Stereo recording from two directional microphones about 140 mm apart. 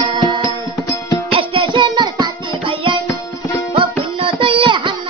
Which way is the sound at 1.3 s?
40° right (ahead or behind).